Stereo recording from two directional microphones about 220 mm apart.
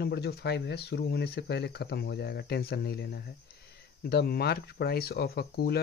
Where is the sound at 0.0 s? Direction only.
45° left (ahead or behind).